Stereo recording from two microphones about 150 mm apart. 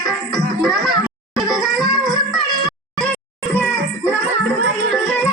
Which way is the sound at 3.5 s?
10° left (ahead or behind).